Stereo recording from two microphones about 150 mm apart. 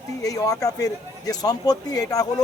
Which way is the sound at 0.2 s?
25° left (ahead or behind).